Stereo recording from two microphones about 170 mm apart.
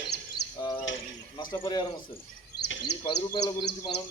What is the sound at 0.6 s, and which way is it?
Bird, 25° left (ahead or behind).